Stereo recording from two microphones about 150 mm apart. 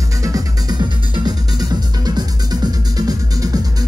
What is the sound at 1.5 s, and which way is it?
Music, 25° right (ahead or behind).